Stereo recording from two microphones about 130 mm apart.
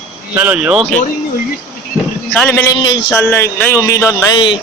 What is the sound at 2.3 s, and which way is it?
Speech, 15° left (ahead or behind).